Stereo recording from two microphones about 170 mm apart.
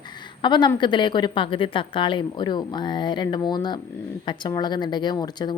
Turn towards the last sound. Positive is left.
turn(degrees=25)  # may be behind; listen again after turning